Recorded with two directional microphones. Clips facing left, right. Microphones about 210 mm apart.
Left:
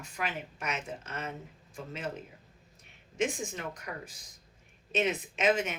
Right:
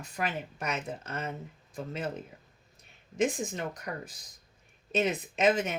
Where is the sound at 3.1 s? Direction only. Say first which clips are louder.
Right 3 dB; 35° right (ahead or behind).